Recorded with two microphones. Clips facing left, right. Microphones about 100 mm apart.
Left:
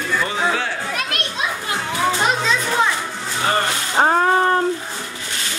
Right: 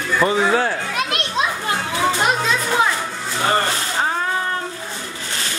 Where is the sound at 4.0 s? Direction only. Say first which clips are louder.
Left 8 dB; 45° left (ahead or behind).